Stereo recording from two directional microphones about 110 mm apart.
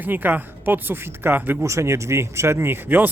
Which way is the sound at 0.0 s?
15° right (ahead or behind).